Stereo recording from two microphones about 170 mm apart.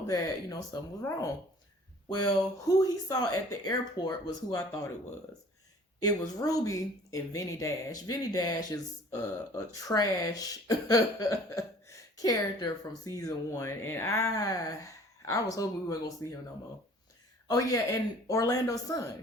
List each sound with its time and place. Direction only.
0.1 s speech: 20° left (ahead or behind)
6.4 s speech: 20° left (ahead or behind)
9.8 s speech: 20° left (ahead or behind)
17.5 s speech: 20° left (ahead or behind)